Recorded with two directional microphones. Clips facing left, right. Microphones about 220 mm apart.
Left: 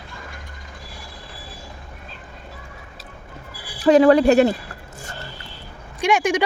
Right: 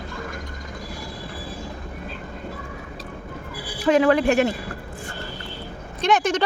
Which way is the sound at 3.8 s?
35° left (ahead or behind).